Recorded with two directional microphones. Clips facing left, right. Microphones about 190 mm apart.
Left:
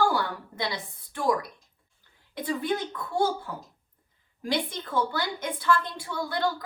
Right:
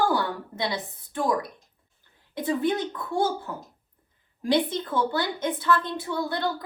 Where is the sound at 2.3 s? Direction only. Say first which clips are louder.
Right 4 dB; 25° right (ahead or behind).